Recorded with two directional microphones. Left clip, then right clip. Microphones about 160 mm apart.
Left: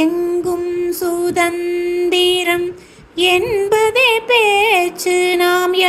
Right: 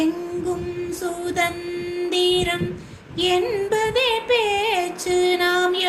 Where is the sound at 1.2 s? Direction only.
50° left (ahead or behind).